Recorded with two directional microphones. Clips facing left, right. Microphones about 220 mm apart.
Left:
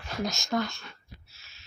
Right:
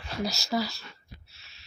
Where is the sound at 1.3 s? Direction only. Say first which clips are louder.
Even; centre (ahead or behind).